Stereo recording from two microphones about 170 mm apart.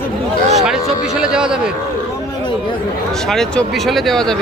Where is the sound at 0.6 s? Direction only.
5° right (ahead or behind).